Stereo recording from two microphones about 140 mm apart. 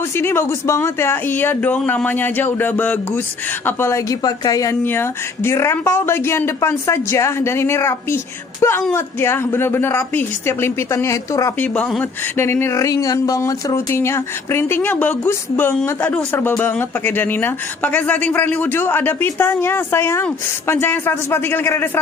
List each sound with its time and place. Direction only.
0.1 s speech: 15° left (ahead or behind)
11.7 s speech: 10° left (ahead or behind)